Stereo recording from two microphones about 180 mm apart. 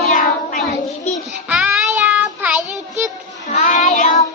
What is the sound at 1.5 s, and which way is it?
Child singing, 5° right (ahead or behind).